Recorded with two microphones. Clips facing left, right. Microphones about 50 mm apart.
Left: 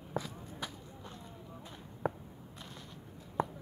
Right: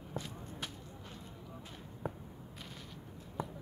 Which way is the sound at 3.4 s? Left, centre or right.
Left.